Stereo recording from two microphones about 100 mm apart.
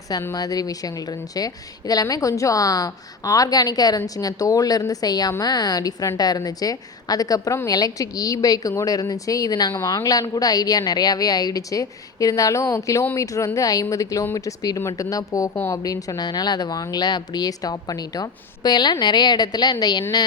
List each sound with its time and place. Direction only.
0.1 s a woman's voice: 35° left (ahead or behind)